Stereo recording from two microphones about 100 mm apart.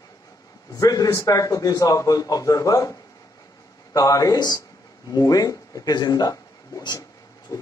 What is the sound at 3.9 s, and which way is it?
A man's voice, 35° left (ahead or behind).